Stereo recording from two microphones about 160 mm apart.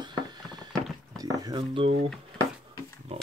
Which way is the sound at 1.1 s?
25° right (ahead or behind).